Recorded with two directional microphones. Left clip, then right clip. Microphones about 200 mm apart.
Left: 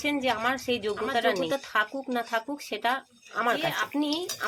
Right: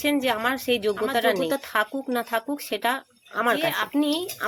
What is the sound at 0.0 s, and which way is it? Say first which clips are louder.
A woman's voice: right 3 dB; 35° right (ahead or behind).